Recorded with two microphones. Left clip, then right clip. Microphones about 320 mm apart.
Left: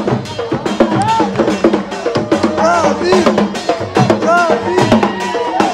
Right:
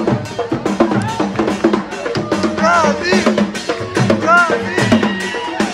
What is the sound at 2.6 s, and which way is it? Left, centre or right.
Music, centre.